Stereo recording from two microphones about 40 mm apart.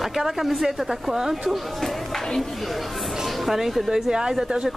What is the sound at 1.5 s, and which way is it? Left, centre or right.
Speech, centre.